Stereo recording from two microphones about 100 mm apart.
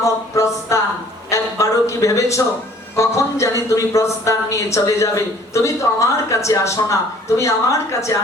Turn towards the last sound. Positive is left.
turn(degrees=30)  # may be behind; listen again after turning